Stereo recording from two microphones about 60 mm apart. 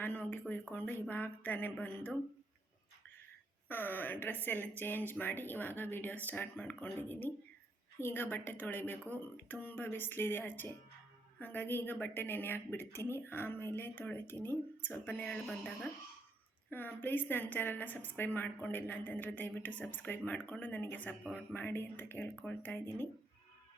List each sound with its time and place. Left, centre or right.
0.0 s a sound: left
0.7 s a woman's voice: left
3.7 s a woman's voice: left
7.0 s a woman's voice: left
16.6 s a woman's voice: left
21.5 s a woman's voice: left
22.2 s a woman's voice: left